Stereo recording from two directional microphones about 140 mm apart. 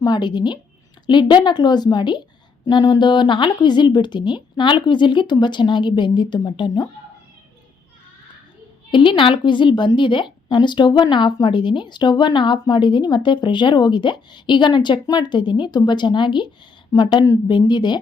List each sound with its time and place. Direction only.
0.0 s a woman's voice: 30° left (ahead or behind)
8.9 s a woman's voice: 35° left (ahead or behind)